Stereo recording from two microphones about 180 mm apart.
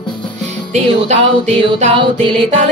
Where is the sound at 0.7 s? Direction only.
40° right (ahead or behind).